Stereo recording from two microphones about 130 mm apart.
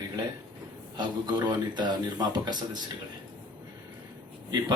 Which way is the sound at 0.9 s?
35° right (ahead or behind).